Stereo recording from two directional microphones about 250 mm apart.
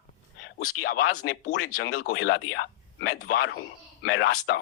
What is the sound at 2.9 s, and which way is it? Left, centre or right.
Speech, left.